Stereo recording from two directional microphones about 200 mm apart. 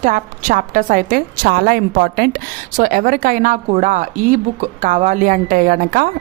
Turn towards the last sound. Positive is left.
turn(degrees=-45)  # may be behind; listen again after turning